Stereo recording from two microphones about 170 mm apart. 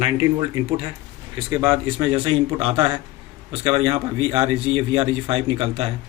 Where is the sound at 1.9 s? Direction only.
30° right (ahead or behind).